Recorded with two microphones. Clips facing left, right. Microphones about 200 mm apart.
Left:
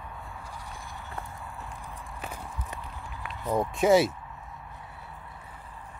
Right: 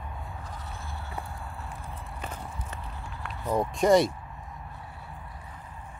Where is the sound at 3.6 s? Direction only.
5° left (ahead or behind).